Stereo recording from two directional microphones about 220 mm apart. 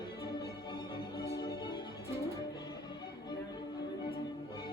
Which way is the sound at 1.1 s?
20° left (ahead or behind).